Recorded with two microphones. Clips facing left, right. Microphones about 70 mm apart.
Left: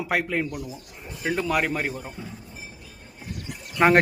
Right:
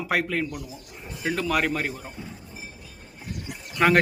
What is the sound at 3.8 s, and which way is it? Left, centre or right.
Speech, centre.